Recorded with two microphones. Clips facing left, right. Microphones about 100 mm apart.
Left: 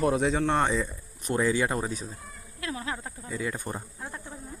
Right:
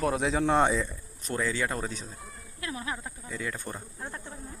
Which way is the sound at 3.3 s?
10° left (ahead or behind).